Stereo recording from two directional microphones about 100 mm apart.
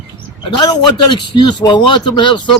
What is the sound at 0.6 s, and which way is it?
A man's voice, 50° left (ahead or behind).